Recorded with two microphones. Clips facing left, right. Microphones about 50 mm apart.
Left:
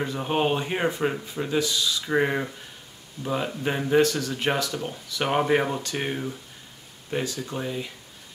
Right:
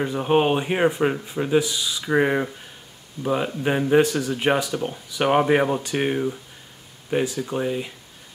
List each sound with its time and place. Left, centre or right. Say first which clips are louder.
0.0 s speech: right 5 dB; centre